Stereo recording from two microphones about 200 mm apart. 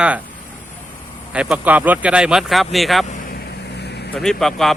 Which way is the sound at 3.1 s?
45° left (ahead or behind).